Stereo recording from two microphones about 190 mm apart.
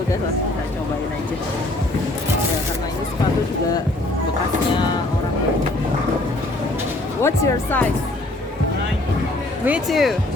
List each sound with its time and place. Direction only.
7.2 s speech: 15° left (ahead or behind)
9.6 s speech: 5° right (ahead or behind)